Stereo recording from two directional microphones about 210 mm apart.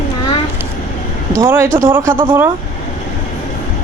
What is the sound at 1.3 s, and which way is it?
Speech, 10° right (ahead or behind).